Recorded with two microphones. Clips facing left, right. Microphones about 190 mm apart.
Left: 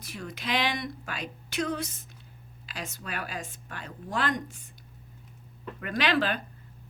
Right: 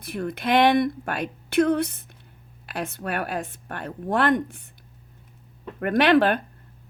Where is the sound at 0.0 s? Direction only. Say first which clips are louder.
Right 9 dB; 55° right (ahead or behind).